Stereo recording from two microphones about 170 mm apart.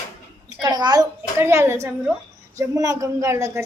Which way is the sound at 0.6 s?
25° right (ahead or behind).